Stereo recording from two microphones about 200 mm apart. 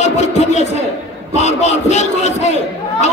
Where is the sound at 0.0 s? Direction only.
35° left (ahead or behind).